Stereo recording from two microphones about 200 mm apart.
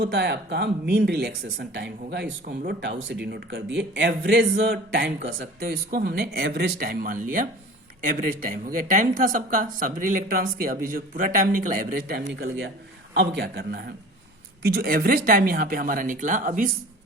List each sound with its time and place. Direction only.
0.0 s speech: 55° right (ahead or behind)